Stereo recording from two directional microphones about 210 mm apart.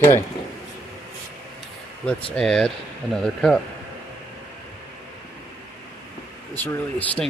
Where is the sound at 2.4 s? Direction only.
Centre (ahead or behind).